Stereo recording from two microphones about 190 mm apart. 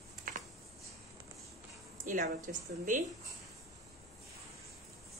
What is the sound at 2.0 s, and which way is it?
A woman's voice, 45° right (ahead or behind).